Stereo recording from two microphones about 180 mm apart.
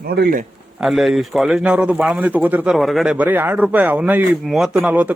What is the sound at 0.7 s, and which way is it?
Speech, centre (ahead or behind).